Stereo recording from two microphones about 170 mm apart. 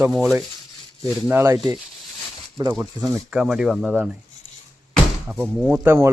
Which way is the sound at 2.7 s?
5° right (ahead or behind).